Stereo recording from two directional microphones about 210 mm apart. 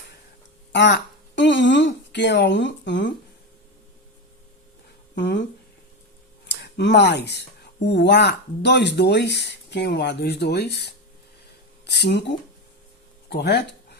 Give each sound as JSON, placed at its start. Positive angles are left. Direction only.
{"t": 0.7, "sound": "speech", "side_deg": 55}
{"t": 5.1, "sound": "speech", "side_deg": 55}
{"t": 6.5, "sound": "speech", "side_deg": 55}